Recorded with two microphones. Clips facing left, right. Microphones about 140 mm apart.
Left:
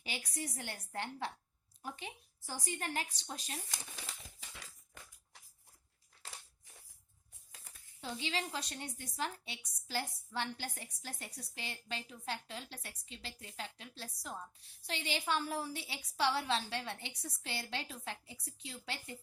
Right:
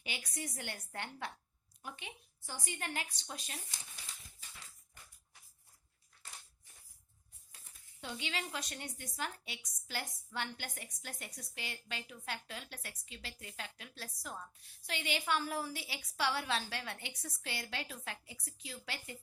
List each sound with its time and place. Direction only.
0.0 s a woman's voice: 35° left (ahead or behind)
3.7 s a sound: 90° left
8.0 s a woman's voice: 35° left (ahead or behind)